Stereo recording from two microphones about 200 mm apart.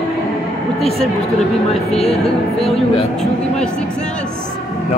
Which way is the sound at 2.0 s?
Centre (ahead or behind).